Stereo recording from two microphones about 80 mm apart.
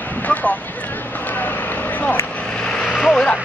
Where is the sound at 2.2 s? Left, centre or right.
Centre.